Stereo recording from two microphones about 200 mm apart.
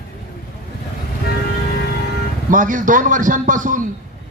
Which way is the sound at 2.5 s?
40° right (ahead or behind).